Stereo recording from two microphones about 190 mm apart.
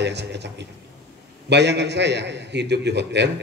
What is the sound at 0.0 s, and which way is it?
A man's voice, 65° right (ahead or behind).